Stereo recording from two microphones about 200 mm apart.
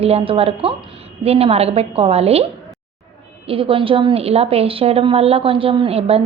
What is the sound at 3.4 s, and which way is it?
A woman's voice, 25° right (ahead or behind).